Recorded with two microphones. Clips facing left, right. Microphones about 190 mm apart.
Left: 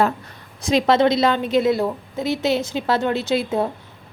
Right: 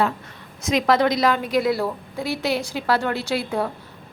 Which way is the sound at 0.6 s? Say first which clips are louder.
Left 3 dB; 30° left (ahead or behind).